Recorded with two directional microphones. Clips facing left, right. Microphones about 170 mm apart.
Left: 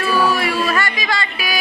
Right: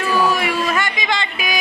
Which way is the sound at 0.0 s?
15° right (ahead or behind).